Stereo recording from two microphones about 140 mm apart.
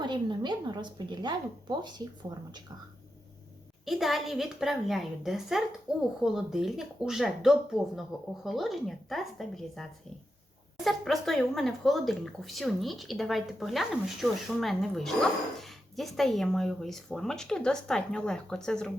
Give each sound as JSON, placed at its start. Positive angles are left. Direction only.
{"t": 0.0, "sound": "a woman's voice", "side_deg": -30}
{"t": 3.8, "sound": "speech", "side_deg": 0}
{"t": 10.8, "sound": "speech", "side_deg": 0}